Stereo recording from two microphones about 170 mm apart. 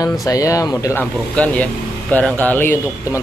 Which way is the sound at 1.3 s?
10° left (ahead or behind).